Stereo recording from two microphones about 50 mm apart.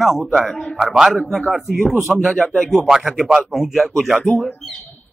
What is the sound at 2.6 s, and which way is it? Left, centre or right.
Speech, centre.